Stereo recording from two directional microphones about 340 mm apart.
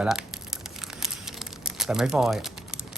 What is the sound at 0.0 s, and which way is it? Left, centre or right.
Crumpling, centre.